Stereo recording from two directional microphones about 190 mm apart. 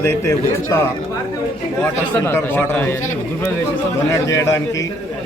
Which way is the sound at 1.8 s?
10° left (ahead or behind).